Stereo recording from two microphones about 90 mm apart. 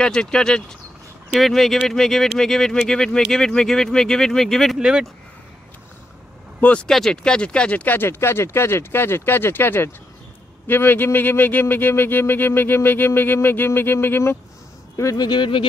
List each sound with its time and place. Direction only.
0.0 s speech: 10° left (ahead or behind)
4.7 s speech: 10° right (ahead or behind)
6.6 s speech: 15° left (ahead or behind); by 15.2 s 35° left (ahead or behind)
15.2 s speech: 60° left (ahead or behind)